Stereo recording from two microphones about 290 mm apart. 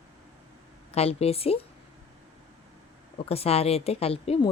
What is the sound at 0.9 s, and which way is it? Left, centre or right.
Speech, left.